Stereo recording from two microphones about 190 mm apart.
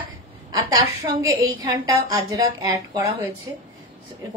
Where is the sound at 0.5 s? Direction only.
15° right (ahead or behind).